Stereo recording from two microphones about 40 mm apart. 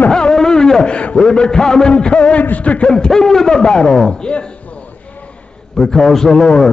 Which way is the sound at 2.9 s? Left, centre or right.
Centre.